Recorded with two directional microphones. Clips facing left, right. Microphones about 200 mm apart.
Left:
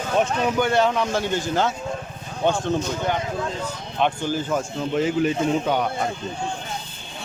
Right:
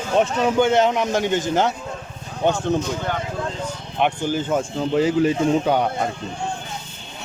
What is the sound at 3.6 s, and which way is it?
Speech, 15° right (ahead or behind).